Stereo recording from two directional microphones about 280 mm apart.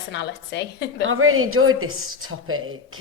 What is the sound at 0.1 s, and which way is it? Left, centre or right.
Speech, left.